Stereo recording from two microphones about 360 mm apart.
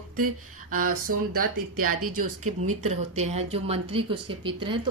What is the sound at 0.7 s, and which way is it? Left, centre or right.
Speech, right.